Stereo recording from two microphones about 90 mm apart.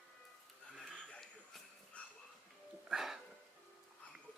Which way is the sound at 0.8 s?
5° left (ahead or behind).